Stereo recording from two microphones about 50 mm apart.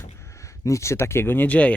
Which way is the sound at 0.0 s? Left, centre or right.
Left.